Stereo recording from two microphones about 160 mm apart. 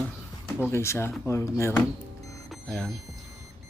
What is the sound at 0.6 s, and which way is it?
Speech, 15° left (ahead or behind).